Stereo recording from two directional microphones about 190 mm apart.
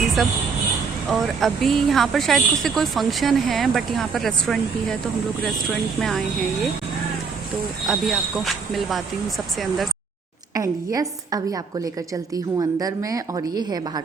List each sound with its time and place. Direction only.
1.4 s speech: centre (ahead or behind)
7.9 s speech: centre (ahead or behind)
10.5 s a woman's voice: 20° right (ahead or behind)